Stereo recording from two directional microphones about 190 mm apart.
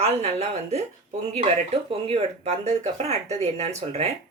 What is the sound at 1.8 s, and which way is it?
Speech, 30° right (ahead or behind).